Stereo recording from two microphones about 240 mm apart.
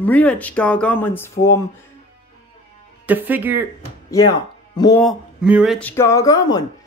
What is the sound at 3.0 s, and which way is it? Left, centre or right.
Speech, centre.